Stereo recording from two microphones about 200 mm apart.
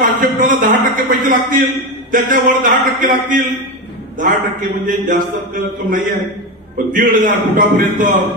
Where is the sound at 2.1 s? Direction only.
40° right (ahead or behind).